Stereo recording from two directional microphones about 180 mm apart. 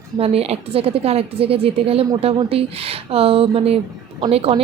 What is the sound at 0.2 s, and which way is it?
A woman's voice, 35° right (ahead or behind).